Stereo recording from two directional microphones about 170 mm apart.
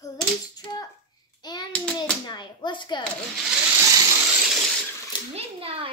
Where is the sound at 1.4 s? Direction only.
25° left (ahead or behind).